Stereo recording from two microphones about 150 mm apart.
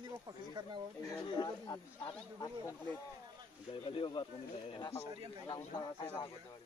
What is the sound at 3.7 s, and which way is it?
Speech, 35° left (ahead or behind).